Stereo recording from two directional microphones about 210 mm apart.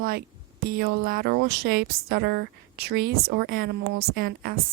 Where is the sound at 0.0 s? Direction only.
45° right (ahead or behind).